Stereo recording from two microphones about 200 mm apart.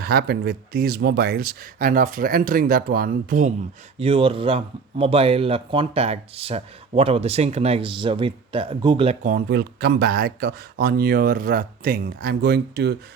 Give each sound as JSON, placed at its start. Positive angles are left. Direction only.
{"t": 0.0, "sound": "speech", "side_deg": -55}
{"t": 3.9, "sound": "speech", "side_deg": -30}
{"t": 9.2, "sound": "speech", "side_deg": -50}